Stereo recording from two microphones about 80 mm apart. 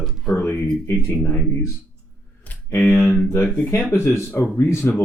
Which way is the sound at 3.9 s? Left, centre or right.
Left.